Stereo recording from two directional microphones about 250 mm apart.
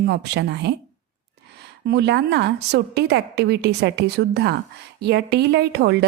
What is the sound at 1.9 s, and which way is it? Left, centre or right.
A woman's voice, right.